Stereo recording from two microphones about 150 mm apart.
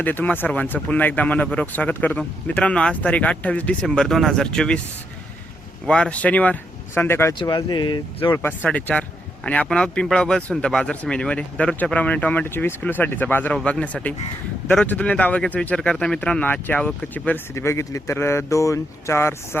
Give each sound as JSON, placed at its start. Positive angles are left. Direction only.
{"t": 0.0, "sound": "speech", "side_deg": 10}
{"t": 5.8, "sound": "speech", "side_deg": 5}
{"t": 7.3, "sound": "speech", "side_deg": 30}
{"t": 8.3, "sound": "speech", "side_deg": 15}